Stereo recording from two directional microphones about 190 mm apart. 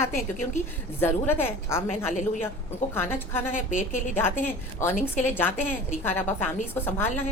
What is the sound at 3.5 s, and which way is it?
Speech, 45° left (ahead or behind).